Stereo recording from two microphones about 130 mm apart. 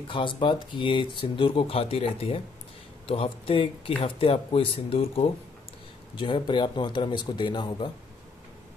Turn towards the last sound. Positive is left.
turn(degrees=35)  # may be behind; listen again after turning